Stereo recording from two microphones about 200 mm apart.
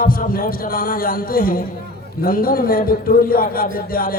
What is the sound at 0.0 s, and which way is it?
A man's voice, 45° left (ahead or behind).